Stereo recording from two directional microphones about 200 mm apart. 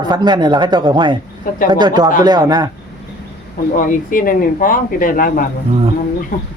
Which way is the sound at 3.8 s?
40° left (ahead or behind).